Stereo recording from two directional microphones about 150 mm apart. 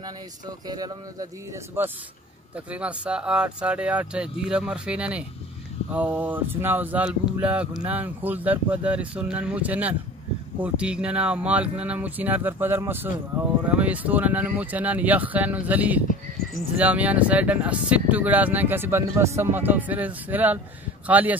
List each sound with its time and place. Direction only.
0.7 s speech: 25° right (ahead or behind)
2.5 s speech: 10° right (ahead or behind)